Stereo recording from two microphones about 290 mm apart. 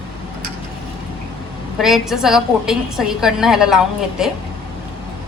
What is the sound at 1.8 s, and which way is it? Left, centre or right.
A woman's voice, centre.